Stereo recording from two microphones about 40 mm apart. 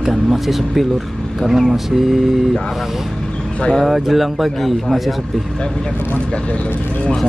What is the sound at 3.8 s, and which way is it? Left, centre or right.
Speech, centre.